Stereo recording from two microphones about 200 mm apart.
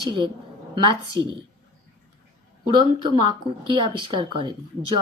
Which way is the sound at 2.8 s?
20° right (ahead or behind).